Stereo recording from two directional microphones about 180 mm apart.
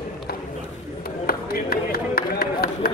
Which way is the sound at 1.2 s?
55° left (ahead or behind).